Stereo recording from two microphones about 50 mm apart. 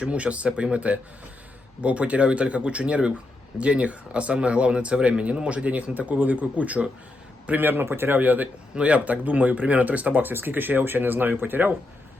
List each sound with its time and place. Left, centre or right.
0.0 s speech: right
7.6 s speech: right
8.7 s speech: right